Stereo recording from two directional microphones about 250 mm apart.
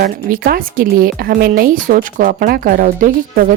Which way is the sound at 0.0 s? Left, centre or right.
Right.